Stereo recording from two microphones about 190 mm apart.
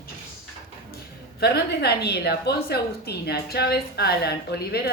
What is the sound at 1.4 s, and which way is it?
A woman's voice, 55° left (ahead or behind).